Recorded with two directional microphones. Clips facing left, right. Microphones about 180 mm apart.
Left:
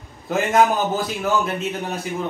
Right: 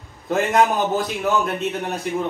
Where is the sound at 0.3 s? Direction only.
Centre (ahead or behind).